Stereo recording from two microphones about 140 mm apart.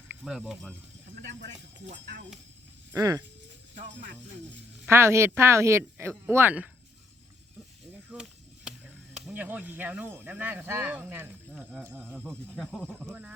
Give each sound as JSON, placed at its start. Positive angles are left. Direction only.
{"t": 0.3, "sound": "speech", "side_deg": 0}
{"t": 2.9, "sound": "speech", "side_deg": -25}
{"t": 4.9, "sound": "speech", "side_deg": -20}
{"t": 8.1, "sound": "chop", "side_deg": -5}
{"t": 9.1, "sound": "speech", "side_deg": -10}
{"t": 12.2, "sound": "speech", "side_deg": 0}